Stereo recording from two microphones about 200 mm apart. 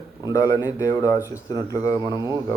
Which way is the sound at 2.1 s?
15° right (ahead or behind).